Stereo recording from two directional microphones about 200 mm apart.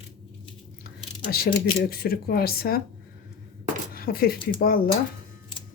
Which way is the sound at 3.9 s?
50° left (ahead or behind).